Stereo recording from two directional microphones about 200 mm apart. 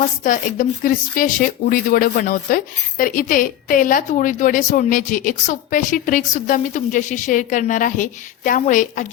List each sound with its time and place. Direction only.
0.2 s a woman's voice: 40° left (ahead or behind)